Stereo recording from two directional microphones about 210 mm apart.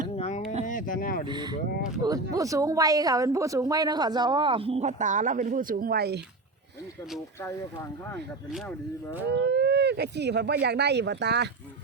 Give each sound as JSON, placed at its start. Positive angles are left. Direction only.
{"t": 0.2, "sound": "a sound", "side_deg": 30}
{"t": 1.3, "sound": "a woman's voice", "side_deg": -20}
{"t": 9.5, "sound": "speech", "side_deg": -55}